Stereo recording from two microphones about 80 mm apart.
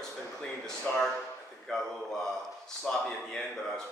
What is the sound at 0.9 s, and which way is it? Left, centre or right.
Speech, left.